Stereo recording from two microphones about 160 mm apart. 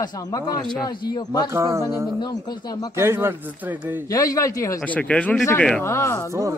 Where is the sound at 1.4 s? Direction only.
20° right (ahead or behind).